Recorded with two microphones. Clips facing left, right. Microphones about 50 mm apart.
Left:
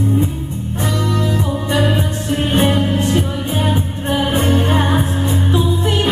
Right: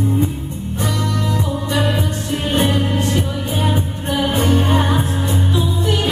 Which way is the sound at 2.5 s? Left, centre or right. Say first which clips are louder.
Left 2 dB; left.